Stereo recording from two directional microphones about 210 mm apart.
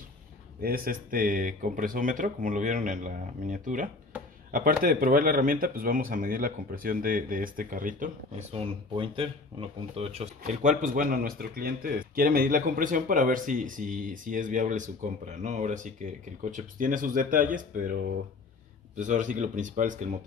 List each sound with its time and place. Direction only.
0.6 s speech: 45° right (ahead or behind)
8.5 s speech: 25° right (ahead or behind)
18.9 s speech: 35° right (ahead or behind)